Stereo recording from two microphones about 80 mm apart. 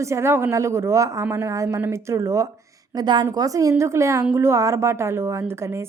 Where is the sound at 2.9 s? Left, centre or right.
Right.